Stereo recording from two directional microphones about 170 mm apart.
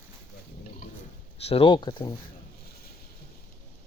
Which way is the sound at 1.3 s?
35° left (ahead or behind).